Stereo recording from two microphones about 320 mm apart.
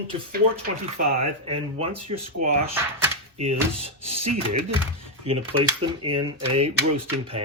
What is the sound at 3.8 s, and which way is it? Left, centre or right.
Speech, centre.